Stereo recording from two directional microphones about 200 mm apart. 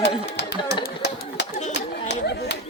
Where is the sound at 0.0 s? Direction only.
60° left (ahead or behind).